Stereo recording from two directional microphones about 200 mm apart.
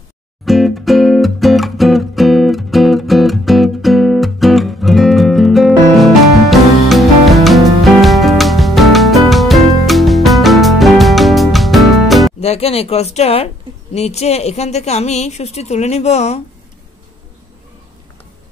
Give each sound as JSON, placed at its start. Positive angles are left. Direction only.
{"t": 0.5, "sound": "music", "side_deg": 0}
{"t": 12.4, "sound": "a sound", "side_deg": 30}
{"t": 13.9, "sound": "a woman's voice", "side_deg": 30}